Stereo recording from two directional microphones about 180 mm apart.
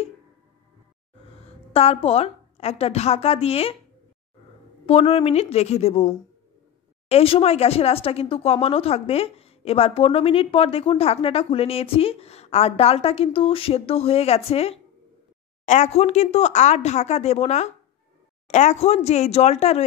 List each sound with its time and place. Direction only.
1.7 s speech: 35° left (ahead or behind)
4.8 s speech: 35° left (ahead or behind)